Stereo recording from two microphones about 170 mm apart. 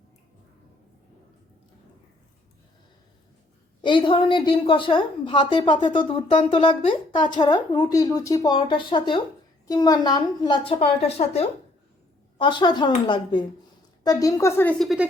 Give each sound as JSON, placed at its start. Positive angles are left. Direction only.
{"t": 3.8, "sound": "a woman's voice", "side_deg": 30}